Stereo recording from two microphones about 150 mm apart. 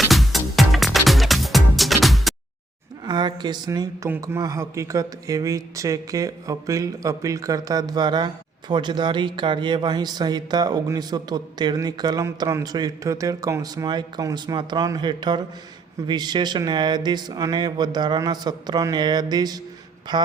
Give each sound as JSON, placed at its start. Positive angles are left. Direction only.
{"t": 0.1, "sound": "music", "side_deg": 0}
{"t": 3.1, "sound": "speech", "side_deg": -30}